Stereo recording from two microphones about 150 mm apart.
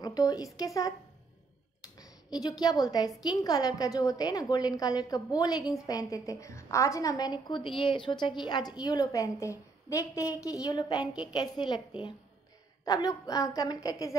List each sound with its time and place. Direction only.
0.0 s a woman's voice: 25° left (ahead or behind)
2.0 s a woman's voice: 25° left (ahead or behind)
12.8 s a woman's voice: 25° left (ahead or behind)